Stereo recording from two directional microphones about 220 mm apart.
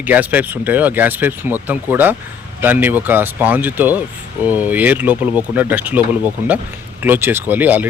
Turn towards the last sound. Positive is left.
turn(degrees=-10)  # may be behind; listen again after turning